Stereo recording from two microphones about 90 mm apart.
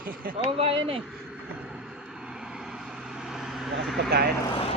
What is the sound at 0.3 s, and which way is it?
Speech, 90° right.